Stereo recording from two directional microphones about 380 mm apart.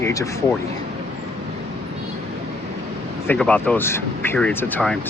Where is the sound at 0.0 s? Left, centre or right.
Centre.